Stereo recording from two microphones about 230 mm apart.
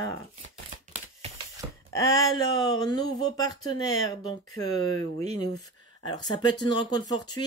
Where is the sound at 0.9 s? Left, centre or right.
Right.